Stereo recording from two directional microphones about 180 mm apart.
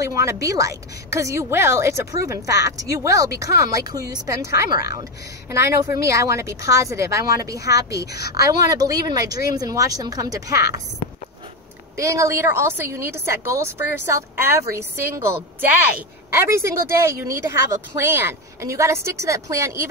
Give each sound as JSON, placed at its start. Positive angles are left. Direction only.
{"t": 0.0, "sound": "a woman's voice", "side_deg": -15}
{"t": 12.0, "sound": "a woman's voice", "side_deg": -15}